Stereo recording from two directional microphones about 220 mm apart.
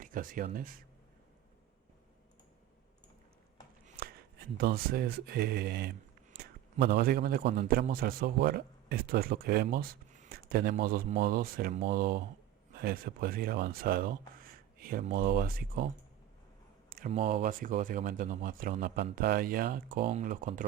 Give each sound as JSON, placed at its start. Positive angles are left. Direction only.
{"t": 0.0, "sound": "speech", "side_deg": -40}
{"t": 3.8, "sound": "a man's voice", "side_deg": -40}
{"t": 16.9, "sound": "a sound", "side_deg": -40}
{"t": 17.3, "sound": "speech", "side_deg": -40}